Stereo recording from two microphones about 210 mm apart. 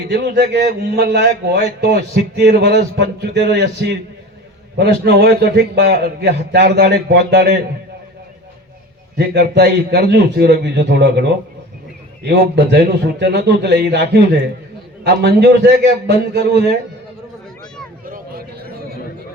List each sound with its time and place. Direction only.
0.1 s a man's voice: 55° right (ahead or behind)
9.1 s a man's voice: 50° right (ahead or behind)
18.0 s a sound: 45° right (ahead or behind)